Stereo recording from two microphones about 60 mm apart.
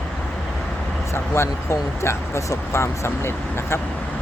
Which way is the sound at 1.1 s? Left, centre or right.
Left.